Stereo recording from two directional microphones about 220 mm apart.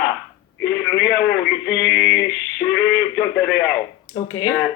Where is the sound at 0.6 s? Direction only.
Centre (ahead or behind).